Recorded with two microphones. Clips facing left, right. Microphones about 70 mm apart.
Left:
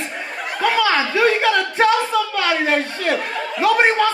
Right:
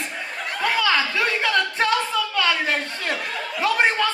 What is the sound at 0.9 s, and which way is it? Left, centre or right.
Speech, left.